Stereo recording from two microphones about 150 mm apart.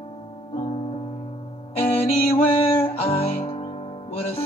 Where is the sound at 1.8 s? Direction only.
40° left (ahead or behind).